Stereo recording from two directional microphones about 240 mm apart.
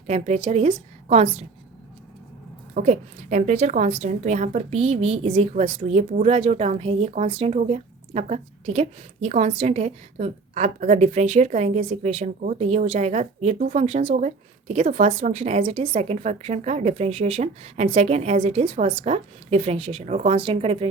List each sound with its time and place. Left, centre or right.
0.1 s a woman's voice: right
2.7 s a woman's voice: right